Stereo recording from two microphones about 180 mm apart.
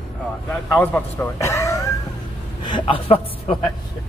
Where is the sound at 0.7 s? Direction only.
10° left (ahead or behind).